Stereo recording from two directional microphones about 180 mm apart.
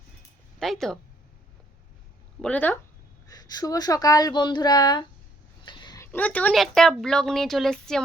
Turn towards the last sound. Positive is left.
turn(degrees=0)  # may be behind; listen again after turning